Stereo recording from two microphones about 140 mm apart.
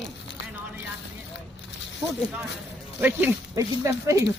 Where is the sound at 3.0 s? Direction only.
10° right (ahead or behind).